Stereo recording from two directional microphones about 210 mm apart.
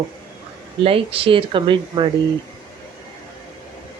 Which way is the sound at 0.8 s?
25° right (ahead or behind).